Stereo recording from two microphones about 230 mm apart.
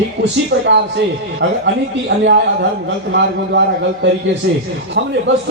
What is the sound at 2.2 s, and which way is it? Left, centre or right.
Speech, right.